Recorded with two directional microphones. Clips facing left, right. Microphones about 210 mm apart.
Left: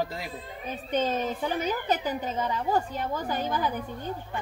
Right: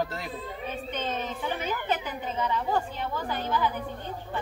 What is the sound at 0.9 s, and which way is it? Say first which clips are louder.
A child's voice: left 8 dB; 40° left (ahead or behind).